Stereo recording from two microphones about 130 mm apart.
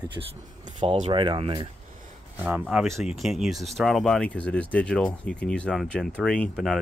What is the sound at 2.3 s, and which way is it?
Speech, 15° right (ahead or behind).